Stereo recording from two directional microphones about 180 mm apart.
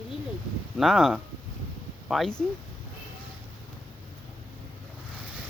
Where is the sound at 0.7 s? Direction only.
Centre (ahead or behind).